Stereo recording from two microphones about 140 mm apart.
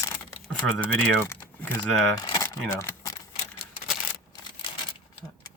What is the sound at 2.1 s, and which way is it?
Keys jangling, 30° left (ahead or behind).